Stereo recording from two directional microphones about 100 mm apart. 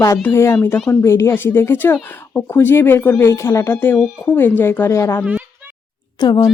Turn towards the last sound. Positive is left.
turn(degrees=40)  # may be behind; listen again after turning